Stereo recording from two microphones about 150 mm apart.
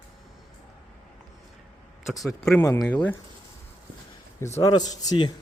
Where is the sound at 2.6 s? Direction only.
20° left (ahead or behind).